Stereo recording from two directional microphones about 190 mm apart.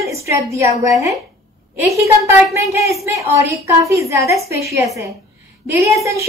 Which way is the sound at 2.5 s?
15° right (ahead or behind).